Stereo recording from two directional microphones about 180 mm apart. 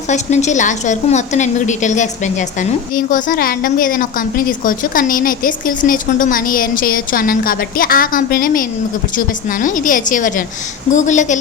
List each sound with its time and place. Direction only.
0.1 s a woman's voice: 40° left (ahead or behind)